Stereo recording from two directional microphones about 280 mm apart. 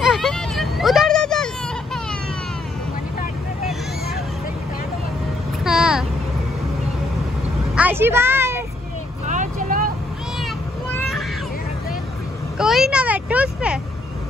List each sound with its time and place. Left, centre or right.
0.0 s vehicle: centre
5.6 s vehicle: centre
7.7 s a sound: centre
9.3 s vehicle: right
11.0 s a sound: centre
12.5 s vehicle: centre